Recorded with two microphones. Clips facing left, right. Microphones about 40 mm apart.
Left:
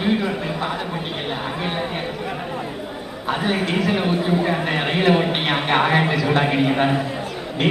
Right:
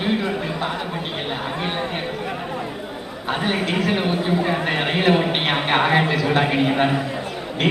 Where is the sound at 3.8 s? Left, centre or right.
Right.